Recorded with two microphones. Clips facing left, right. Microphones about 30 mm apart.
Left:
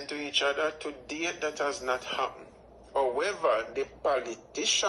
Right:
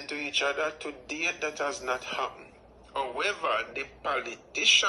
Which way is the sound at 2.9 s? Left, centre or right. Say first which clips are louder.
Left 2 dB; right.